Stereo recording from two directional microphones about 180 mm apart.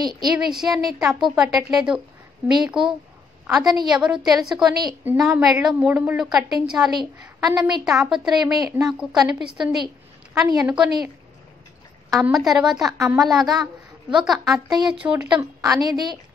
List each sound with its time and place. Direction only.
0.0 s a woman's voice: 20° right (ahead or behind)
0.4 s a woman's voice: 5° right (ahead or behind)
3.9 s a woman's voice: 5° right (ahead or behind)
8.5 s a woman's voice: 15° right (ahead or behind)
8.8 s a woman's voice: centre (ahead or behind)
12.1 s a woman's voice: centre (ahead or behind)
12.9 s a woman's voice: 15° right (ahead or behind)
13.2 s a woman's voice: centre (ahead or behind)
15.6 s a woman's voice: 20° right (ahead or behind)